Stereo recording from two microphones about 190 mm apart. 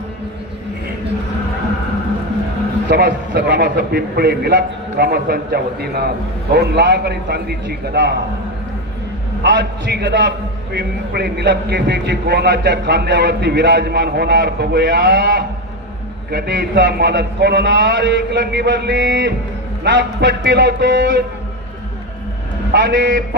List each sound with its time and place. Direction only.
2.9 s a man's voice: 60° right (ahead or behind)
9.4 s a man's voice: 65° right (ahead or behind)
22.7 s a man's voice: 65° right (ahead or behind)